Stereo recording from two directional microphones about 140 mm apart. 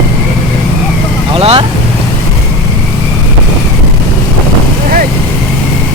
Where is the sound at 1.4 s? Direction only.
45° right (ahead or behind).